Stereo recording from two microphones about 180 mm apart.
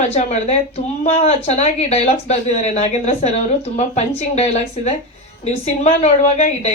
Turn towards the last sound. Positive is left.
turn(degrees=40)  # may be behind; listen again after turning